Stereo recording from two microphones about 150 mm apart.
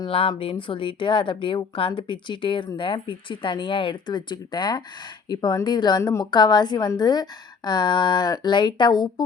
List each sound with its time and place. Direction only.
0.0 s a woman's voice: 35° left (ahead or behind)